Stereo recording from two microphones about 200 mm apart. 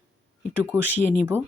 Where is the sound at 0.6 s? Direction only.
10° right (ahead or behind).